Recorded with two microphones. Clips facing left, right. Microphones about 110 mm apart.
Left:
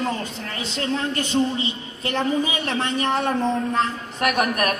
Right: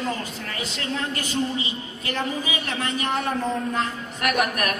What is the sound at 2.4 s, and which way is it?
A man's voice, 30° left (ahead or behind).